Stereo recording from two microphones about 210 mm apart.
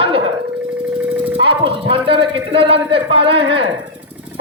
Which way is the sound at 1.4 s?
25° right (ahead or behind).